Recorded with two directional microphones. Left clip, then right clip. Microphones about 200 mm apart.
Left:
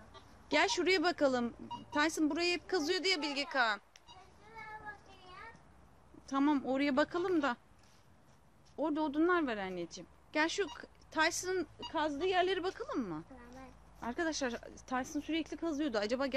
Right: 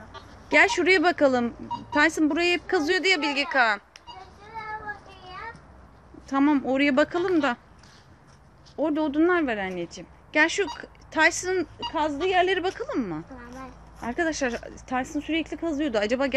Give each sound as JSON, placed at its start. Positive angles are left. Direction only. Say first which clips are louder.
{"t": 0.5, "sound": "speech", "louder": "right 11 dB", "side_deg": 25}
{"t": 6.2, "sound": "speech", "louder": "right 10 dB", "side_deg": 20}
{"t": 7.2, "sound": "speech", "louder": "right 10 dB", "side_deg": 5}
{"t": 8.7, "sound": "speech", "louder": "right 10 dB", "side_deg": 20}
{"t": 11.9, "sound": "speech", "louder": "right 9 dB", "side_deg": 30}
{"t": 13.4, "sound": "a sound", "louder": "right 12 dB", "side_deg": 5}
{"t": 14.0, "sound": "speech", "louder": "right 10 dB", "side_deg": 25}